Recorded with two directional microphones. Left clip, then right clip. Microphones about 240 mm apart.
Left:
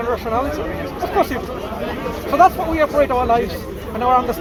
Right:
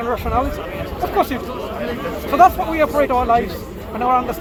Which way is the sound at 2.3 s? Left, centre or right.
Right.